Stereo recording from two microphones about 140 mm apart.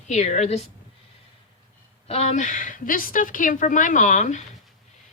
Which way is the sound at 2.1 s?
50° left (ahead or behind).